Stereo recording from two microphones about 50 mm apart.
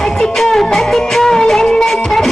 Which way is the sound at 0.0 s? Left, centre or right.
Centre.